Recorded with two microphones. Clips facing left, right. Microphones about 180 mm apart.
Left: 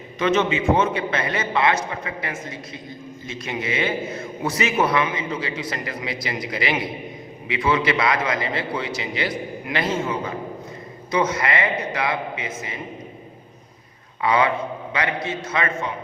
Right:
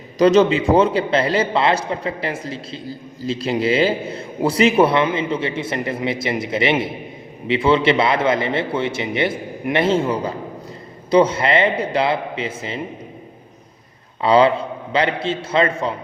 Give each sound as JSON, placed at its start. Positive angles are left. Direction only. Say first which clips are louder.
{"t": 0.2, "sound": "a man's voice", "louder": "right 7 dB", "side_deg": -35}
{"t": 14.2, "sound": "a man's voice", "louder": "right 6 dB", "side_deg": -30}